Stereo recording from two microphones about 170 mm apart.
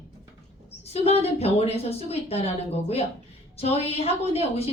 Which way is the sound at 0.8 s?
35° left (ahead or behind).